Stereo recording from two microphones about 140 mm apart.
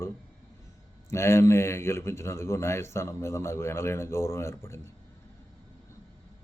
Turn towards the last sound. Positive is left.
turn(degrees=20)  # may be behind; listen again after turning